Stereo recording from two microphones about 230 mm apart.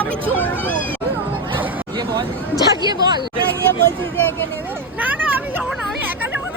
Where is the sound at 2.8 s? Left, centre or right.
Centre.